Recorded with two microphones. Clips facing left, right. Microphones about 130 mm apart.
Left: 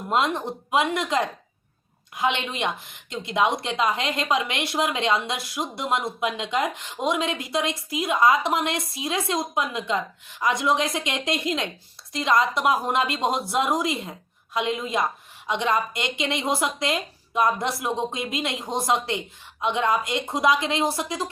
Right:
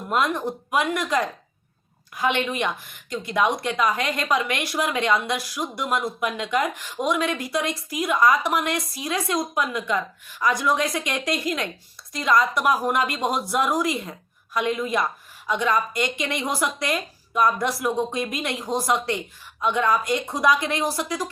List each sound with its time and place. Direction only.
0.1 s speech: 25° left (ahead or behind)